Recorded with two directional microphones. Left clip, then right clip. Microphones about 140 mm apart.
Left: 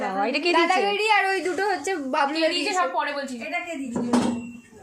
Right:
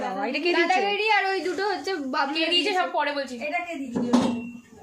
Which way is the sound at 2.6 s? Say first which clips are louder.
Even; 30° right (ahead or behind).